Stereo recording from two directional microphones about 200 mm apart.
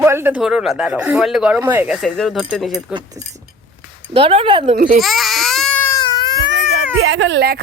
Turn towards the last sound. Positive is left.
turn(degrees=-55)  # may be behind; listen again after turning